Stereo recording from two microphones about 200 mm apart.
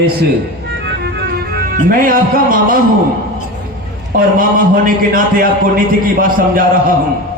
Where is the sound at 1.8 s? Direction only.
45° right (ahead or behind).